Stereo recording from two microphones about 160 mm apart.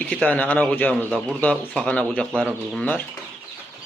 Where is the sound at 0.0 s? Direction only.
10° left (ahead or behind).